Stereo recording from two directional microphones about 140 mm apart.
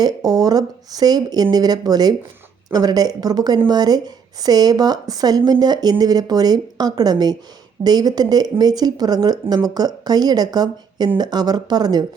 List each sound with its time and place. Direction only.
0.0 s speech: 25° right (ahead or behind)